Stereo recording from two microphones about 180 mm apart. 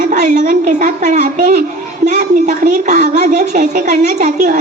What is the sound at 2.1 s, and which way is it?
A woman's voice, 45° right (ahead or behind).